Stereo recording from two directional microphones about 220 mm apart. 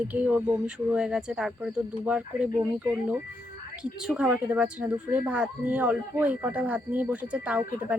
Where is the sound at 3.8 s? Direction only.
5° right (ahead or behind).